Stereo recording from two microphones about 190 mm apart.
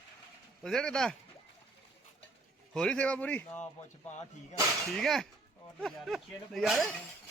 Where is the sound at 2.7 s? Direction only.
5° left (ahead or behind).